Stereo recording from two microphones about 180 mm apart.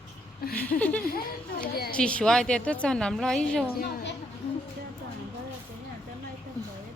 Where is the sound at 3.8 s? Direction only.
55° left (ahead or behind).